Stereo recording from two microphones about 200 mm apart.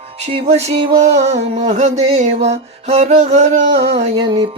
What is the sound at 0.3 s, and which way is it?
Mantra, 30° right (ahead or behind).